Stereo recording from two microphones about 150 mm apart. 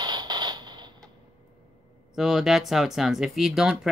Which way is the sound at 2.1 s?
5° right (ahead or behind).